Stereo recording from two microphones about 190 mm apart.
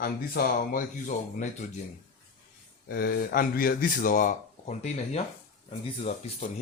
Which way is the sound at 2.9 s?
50° left (ahead or behind).